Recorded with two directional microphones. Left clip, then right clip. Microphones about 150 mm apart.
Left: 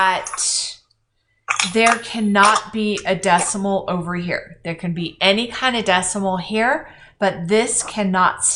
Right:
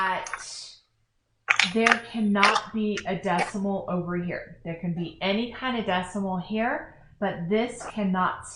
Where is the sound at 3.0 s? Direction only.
25° left (ahead or behind).